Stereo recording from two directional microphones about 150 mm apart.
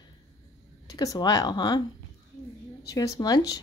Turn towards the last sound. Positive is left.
turn(degrees=25)  # may be behind; listen again after turning